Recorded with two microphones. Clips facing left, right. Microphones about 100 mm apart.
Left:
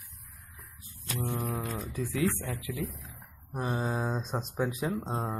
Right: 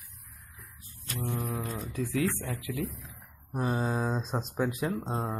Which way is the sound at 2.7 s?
Centre (ahead or behind).